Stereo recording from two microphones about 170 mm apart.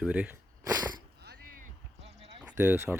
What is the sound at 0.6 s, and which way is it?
Speech, 20° right (ahead or behind).